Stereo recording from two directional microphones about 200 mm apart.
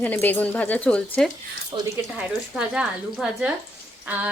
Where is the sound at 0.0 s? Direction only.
10° left (ahead or behind).